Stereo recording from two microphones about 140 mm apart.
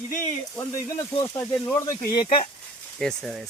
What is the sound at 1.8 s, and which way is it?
Speech, 30° left (ahead or behind).